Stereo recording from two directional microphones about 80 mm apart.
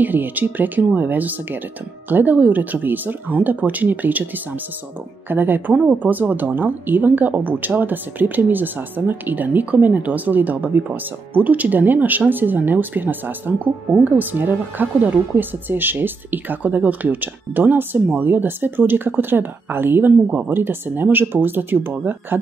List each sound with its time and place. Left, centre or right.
0.0 s a woman's voice: right
5.3 s a woman's voice: right